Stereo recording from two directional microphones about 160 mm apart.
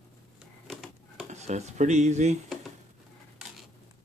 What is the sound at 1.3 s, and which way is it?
Speech, 45° right (ahead or behind).